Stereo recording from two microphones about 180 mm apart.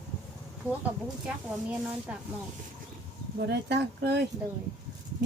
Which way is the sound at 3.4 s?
70° right (ahead or behind).